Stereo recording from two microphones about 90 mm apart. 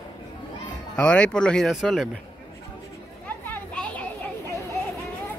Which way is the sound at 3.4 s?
15° left (ahead or behind).